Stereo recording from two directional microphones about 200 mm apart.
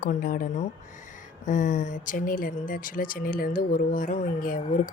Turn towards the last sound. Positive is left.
turn(degrees=40)  # may be behind; listen again after turning